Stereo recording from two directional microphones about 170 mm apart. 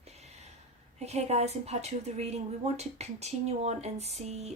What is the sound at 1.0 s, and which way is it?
A woman's voice, 40° right (ahead or behind).